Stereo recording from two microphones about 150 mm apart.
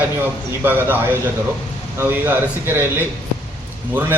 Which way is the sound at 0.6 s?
15° right (ahead or behind).